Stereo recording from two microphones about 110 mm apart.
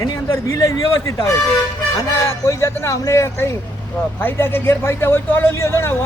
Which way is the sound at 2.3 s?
25° left (ahead or behind).